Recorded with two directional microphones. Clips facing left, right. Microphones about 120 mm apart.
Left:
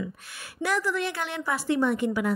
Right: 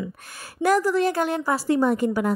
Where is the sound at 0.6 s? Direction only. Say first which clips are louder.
Right 7 dB; 40° right (ahead or behind).